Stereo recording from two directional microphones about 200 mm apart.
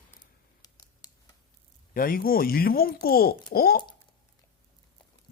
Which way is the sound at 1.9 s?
45° left (ahead or behind).